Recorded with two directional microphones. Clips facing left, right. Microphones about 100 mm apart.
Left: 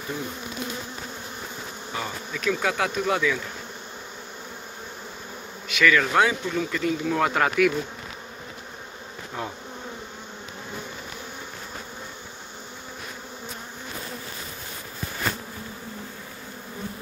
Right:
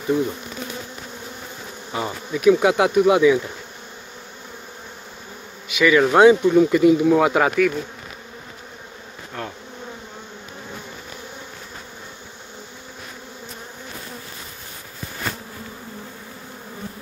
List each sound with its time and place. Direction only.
2.0 s speech: 20° right (ahead or behind)
5.7 s speech: 10° right (ahead or behind)
5.9 s speech: 20° right (ahead or behind); by 7.7 s 5° right (ahead or behind)
9.4 s bee: 15° left (ahead or behind)